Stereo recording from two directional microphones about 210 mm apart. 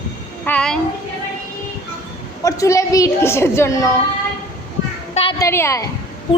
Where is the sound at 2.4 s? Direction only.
15° left (ahead or behind).